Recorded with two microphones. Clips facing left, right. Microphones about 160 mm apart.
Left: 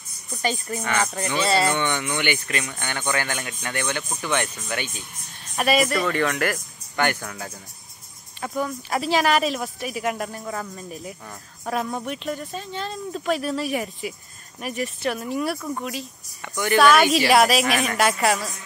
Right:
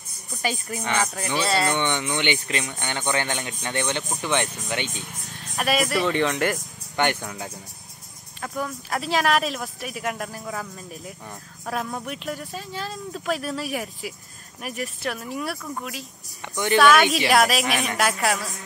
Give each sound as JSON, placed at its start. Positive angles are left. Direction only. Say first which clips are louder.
{"t": 0.3, "sound": "speech", "louder": "left 2 dB", "side_deg": -5}
{"t": 1.8, "sound": "speech", "louder": "even", "side_deg": -20}
{"t": 5.6, "sound": "speech", "louder": "left 2 dB", "side_deg": 0}
{"t": 6.0, "sound": "speech", "louder": "right 1 dB", "side_deg": -20}
{"t": 8.4, "sound": "speech", "louder": "left 3 dB", "side_deg": 0}